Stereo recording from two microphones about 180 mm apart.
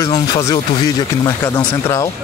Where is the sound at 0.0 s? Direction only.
20° left (ahead or behind).